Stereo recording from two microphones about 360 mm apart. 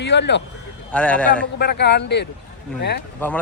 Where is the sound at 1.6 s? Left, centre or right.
Left.